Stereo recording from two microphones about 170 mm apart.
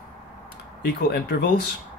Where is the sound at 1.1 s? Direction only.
70° left (ahead or behind).